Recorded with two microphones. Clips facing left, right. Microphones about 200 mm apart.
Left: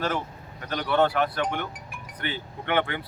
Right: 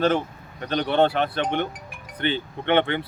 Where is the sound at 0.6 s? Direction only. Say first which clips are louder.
Right 3 dB; 25° right (ahead or behind).